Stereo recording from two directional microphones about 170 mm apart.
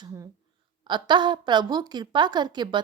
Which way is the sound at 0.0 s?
20° right (ahead or behind).